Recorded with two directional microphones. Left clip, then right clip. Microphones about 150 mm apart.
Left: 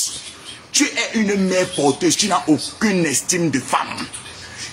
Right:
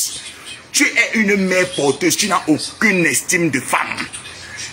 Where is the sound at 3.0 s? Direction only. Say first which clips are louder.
Right 4 dB; 35° left (ahead or behind).